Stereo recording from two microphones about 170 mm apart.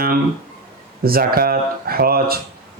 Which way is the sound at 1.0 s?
60° right (ahead or behind).